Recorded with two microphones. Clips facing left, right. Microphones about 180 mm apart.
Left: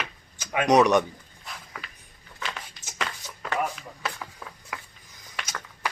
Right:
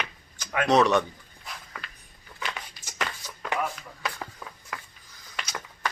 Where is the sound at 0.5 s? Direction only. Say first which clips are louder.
Left 2 dB; 15° left (ahead or behind).